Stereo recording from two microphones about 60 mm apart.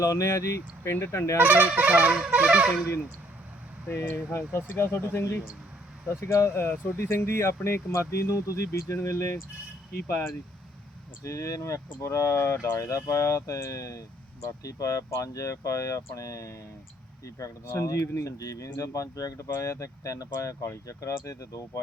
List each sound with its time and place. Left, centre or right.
0.0 s speech: left
1.4 s wind instrument: right
4.1 s speech: left
6.5 s speech: left
11.2 s speech: left
17.7 s speech: left
18.3 s speech: left